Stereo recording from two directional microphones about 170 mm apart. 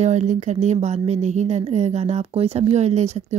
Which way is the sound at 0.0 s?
45° right (ahead or behind).